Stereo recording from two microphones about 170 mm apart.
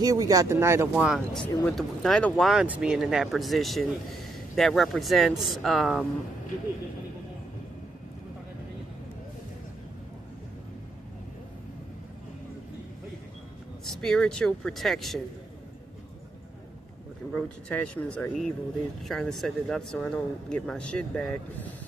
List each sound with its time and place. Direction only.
0.0 s speech: 20° right (ahead or behind); by 6.0 s centre (ahead or behind)
13.8 s speech: centre (ahead or behind)
17.3 s speech: 5° left (ahead or behind)